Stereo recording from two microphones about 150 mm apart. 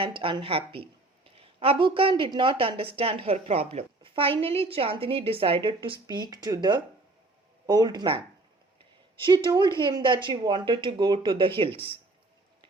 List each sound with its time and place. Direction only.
0.0 s a woman's voice: 35° right (ahead or behind)
9.2 s a woman's voice: 30° right (ahead or behind)